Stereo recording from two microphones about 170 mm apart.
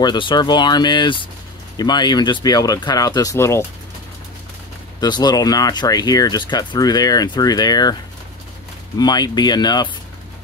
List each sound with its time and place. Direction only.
0.0 s speech: 25° left (ahead or behind)
5.0 s speech: 25° left (ahead or behind)
8.9 s speech: 25° left (ahead or behind)